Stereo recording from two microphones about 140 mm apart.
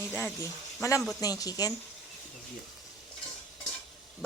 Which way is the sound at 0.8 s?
20° left (ahead or behind).